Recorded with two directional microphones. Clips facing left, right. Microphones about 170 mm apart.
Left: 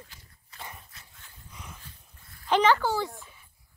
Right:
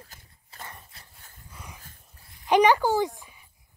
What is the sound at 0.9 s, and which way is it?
Dog, 35° right (ahead or behind).